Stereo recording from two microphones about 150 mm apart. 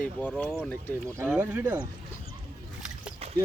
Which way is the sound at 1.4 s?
15° right (ahead or behind).